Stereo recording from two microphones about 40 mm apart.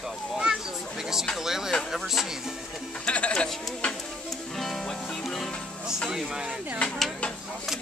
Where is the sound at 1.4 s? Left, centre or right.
Centre.